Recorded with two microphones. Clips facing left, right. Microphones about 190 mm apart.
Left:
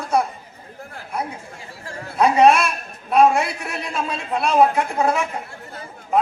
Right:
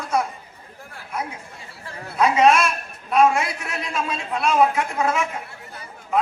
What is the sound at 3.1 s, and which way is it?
A man's voice, 35° left (ahead or behind).